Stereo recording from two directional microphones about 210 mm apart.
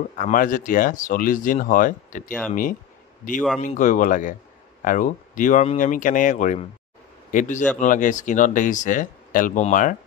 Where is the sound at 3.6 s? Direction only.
40° left (ahead or behind).